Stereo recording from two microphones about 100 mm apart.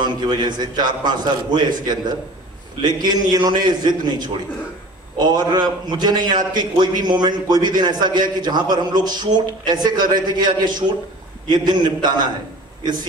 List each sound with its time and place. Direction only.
0.0 s a man's voice: 45° right (ahead or behind)